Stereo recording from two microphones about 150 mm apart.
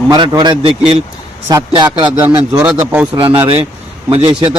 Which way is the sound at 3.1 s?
35° right (ahead or behind).